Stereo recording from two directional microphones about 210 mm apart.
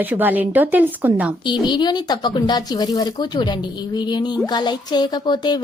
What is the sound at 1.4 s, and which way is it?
Speech, 20° left (ahead or behind).